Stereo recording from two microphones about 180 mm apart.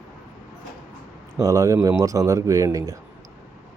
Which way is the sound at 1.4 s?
20° right (ahead or behind).